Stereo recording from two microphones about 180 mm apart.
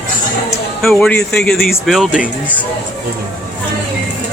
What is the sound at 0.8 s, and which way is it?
Speech, 5° left (ahead or behind).